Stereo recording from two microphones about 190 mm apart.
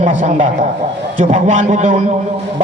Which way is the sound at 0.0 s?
40° right (ahead or behind).